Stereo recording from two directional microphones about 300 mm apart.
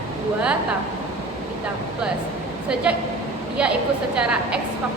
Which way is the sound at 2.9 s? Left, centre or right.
Centre.